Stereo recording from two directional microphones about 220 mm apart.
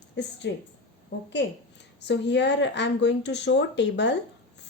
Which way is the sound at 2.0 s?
50° left (ahead or behind).